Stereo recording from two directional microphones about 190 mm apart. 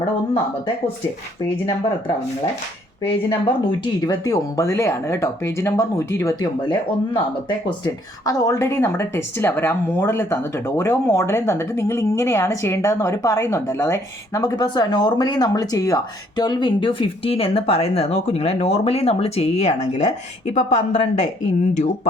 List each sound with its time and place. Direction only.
3.1 s speech: 25° left (ahead or behind)